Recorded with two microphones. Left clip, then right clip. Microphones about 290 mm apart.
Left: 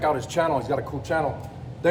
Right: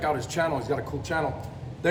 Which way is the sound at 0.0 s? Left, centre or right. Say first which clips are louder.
Left 3 dB; centre.